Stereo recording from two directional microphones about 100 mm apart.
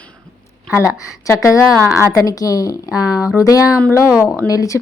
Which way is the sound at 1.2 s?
30° left (ahead or behind).